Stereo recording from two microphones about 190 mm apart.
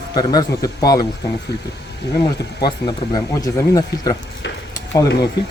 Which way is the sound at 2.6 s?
25° left (ahead or behind).